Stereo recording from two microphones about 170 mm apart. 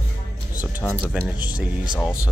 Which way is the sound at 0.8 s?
10° left (ahead or behind).